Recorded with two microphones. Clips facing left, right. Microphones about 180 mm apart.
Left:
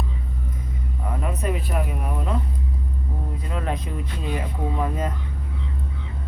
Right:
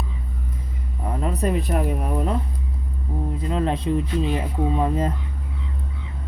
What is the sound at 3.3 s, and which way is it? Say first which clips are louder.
Speech: right 5 dB; 25° right (ahead or behind).